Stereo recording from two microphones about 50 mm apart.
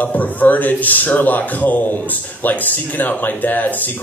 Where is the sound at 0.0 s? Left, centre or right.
Left.